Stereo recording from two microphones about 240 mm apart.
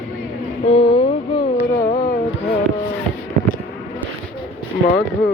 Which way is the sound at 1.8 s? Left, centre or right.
Left.